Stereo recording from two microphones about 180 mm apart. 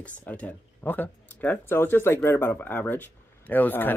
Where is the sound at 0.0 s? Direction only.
10° left (ahead or behind).